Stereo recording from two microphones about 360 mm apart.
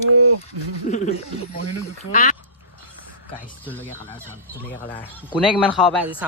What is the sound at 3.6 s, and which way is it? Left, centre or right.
Speech, centre.